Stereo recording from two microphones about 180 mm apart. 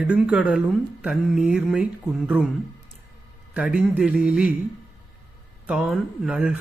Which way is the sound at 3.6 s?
5° right (ahead or behind).